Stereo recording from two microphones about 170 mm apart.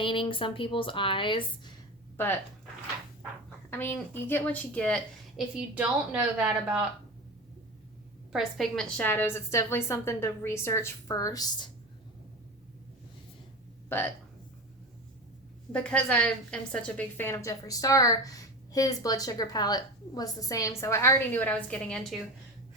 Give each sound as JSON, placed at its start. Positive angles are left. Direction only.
{"t": 0.0, "sound": "a woman's voice", "side_deg": 30}
{"t": 3.7, "sound": "a woman's voice", "side_deg": 10}
{"t": 8.3, "sound": "a woman's voice", "side_deg": 0}
{"t": 13.9, "sound": "a woman's voice", "side_deg": 15}
{"t": 15.7, "sound": "a woman's voice", "side_deg": 5}